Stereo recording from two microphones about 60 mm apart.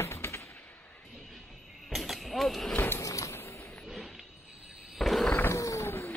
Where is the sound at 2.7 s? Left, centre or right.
Left.